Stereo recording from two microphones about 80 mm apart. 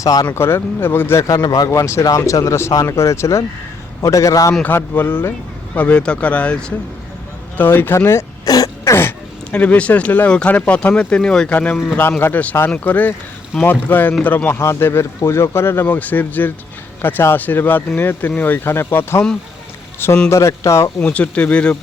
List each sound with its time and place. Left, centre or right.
0.0 s speech: left
0.3 s speech: left
1.2 s speech: left
1.7 s speech: left
4.6 s speech: left
7.5 s speech: left
8.4 s throat clearing: left
8.8 s speech: left; by 11.5 s centre
11.5 s speech: left
20.3 s speech: left
21.0 s speech: centre